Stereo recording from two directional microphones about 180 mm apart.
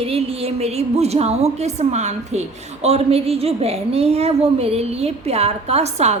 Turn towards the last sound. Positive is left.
turn(degrees=-35)  # may be behind; listen again after turning